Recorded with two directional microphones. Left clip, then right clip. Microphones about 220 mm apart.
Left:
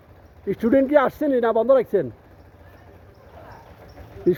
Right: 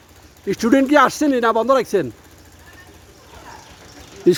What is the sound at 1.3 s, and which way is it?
Speech, 15° right (ahead or behind).